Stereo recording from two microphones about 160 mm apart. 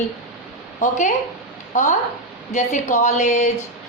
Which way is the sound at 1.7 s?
50° left (ahead or behind).